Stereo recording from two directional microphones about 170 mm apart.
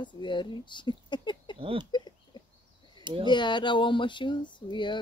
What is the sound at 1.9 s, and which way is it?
Chicken, 25° left (ahead or behind).